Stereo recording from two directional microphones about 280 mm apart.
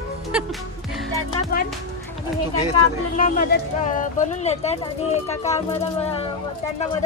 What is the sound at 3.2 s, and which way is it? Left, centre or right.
Speech, left.